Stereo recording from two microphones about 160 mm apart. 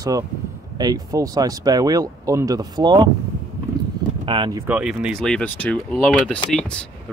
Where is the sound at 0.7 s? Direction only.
25° right (ahead or behind).